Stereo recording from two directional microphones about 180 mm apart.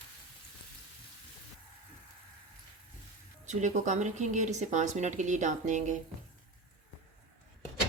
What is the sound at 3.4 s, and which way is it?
Speech, 40° right (ahead or behind).